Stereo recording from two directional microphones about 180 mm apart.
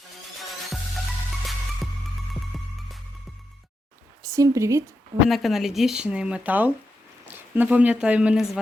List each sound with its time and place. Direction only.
1.3 s music: centre (ahead or behind)
4.2 s speech: 20° right (ahead or behind)
5.3 s speech: centre (ahead or behind)